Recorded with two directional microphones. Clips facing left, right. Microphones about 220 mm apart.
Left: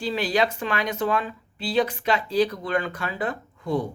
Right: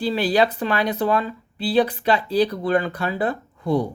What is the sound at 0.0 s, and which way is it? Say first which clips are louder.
Speech: right 4 dB; 35° right (ahead or behind).